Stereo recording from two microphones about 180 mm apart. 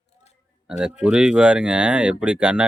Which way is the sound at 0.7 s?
5° right (ahead or behind).